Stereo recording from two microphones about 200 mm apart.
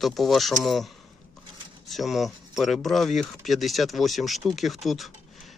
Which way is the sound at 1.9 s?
Centre (ahead or behind).